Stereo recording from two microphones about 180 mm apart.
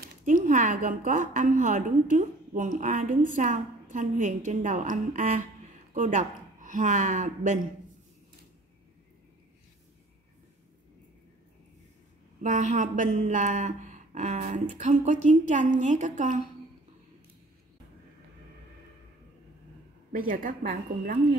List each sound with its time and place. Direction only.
0.0 s a woman's voice: 50° right (ahead or behind)
12.4 s speech: 45° right (ahead or behind)
20.1 s speech: 50° right (ahead or behind)